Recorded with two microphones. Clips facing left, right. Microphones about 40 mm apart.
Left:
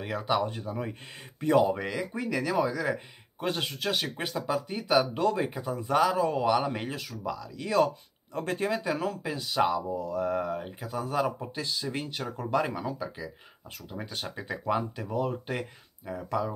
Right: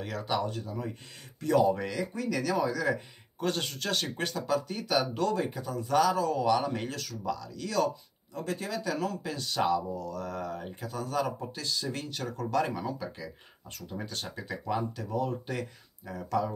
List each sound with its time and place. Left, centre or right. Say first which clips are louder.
0.0 s speech: left 3 dB; centre
7.5 s speech: left 5 dB; left
8.4 s speech: left 4 dB; left
8.6 s speech: left 3 dB; left
14.3 s speech: left 4 dB; left